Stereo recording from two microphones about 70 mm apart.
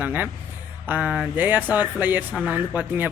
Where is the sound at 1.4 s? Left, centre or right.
Right.